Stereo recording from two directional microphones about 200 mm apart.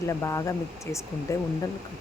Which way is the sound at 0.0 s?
15° left (ahead or behind).